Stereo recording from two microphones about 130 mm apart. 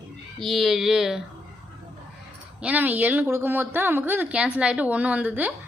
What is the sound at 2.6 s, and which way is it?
A woman's voice, 15° right (ahead or behind).